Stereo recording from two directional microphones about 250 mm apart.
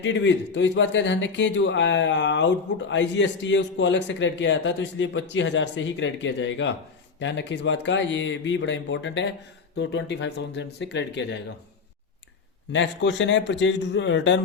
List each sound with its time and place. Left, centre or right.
0.0 s a man's voice: left
12.7 s a man's voice: left